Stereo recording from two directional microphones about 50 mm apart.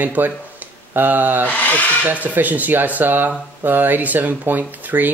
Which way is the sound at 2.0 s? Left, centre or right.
Right.